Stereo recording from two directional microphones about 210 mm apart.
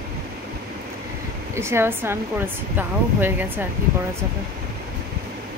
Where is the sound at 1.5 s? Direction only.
10° right (ahead or behind).